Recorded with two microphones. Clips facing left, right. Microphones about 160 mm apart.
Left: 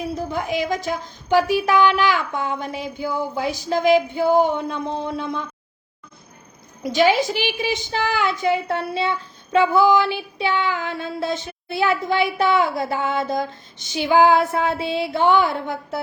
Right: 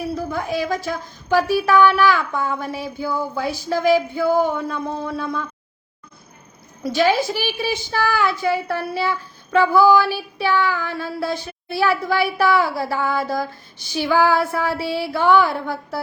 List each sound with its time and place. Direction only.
0.0 s a woman's voice: 20° left (ahead or behind)
6.8 s a woman's voice: 15° left (ahead or behind)